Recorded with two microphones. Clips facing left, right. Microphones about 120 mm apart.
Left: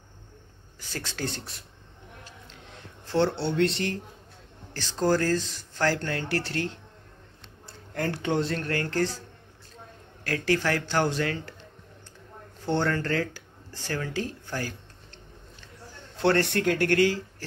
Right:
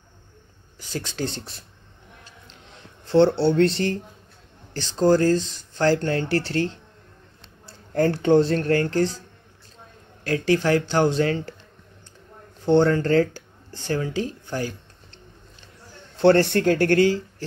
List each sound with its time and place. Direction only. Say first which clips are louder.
0.7 s speech: right 6 dB; 20° right (ahead or behind)
3.1 s speech: right 8 dB; 30° right (ahead or behind)
4.7 s speech: right 6 dB; 25° right (ahead or behind)
10.2 s speech: right 5 dB; 20° right (ahead or behind)
12.6 s speech: right 8 dB; 20° right (ahead or behind)
16.2 s speech: right 7 dB; 30° right (ahead or behind)